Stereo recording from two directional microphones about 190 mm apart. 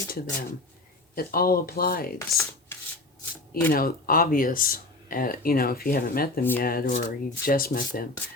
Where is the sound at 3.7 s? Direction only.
50° left (ahead or behind).